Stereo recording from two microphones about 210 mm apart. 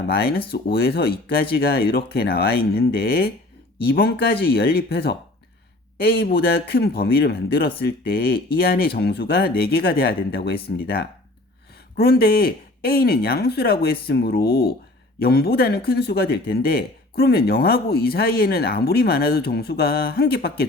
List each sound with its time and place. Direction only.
0.1 s speech: 45° left (ahead or behind)